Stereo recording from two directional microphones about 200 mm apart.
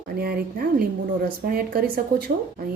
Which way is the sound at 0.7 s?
50° right (ahead or behind).